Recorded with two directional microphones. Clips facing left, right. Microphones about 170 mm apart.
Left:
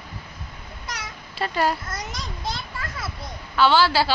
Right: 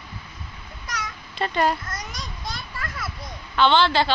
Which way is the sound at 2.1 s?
25° left (ahead or behind).